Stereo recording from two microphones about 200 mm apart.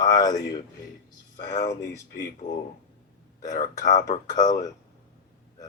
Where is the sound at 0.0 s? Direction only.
20° left (ahead or behind).